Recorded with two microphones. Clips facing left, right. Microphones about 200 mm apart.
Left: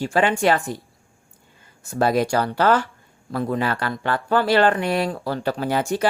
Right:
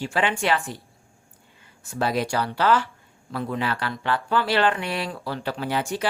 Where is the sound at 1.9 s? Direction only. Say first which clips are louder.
Left 5 dB; 45° left (ahead or behind).